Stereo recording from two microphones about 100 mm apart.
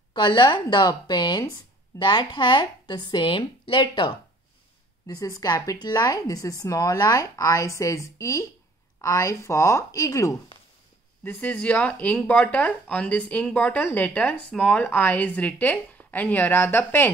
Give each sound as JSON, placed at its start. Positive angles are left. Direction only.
{"t": 0.1, "sound": "speech", "side_deg": 50}
{"t": 5.0, "sound": "a woman's voice", "side_deg": 35}
{"t": 11.2, "sound": "speech", "side_deg": 15}